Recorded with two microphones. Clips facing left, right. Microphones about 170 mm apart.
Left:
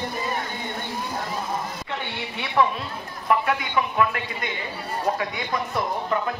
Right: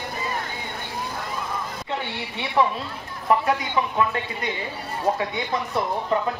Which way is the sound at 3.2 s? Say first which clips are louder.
Right 2 dB; 25° right (ahead or behind).